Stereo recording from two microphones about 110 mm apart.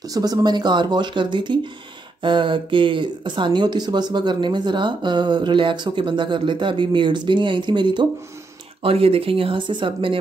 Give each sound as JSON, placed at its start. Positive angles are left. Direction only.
{"t": 0.0, "sound": "speech", "side_deg": -35}
{"t": 8.8, "sound": "speech", "side_deg": -60}